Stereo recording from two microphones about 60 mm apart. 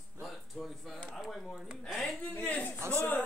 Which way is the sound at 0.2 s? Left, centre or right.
Centre.